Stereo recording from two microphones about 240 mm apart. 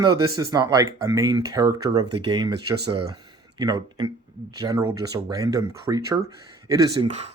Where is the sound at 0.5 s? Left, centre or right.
Centre.